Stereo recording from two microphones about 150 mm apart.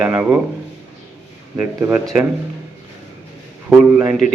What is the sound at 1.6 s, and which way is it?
Speech, 10° right (ahead or behind).